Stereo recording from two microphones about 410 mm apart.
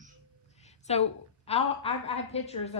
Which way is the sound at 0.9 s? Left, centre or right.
Centre.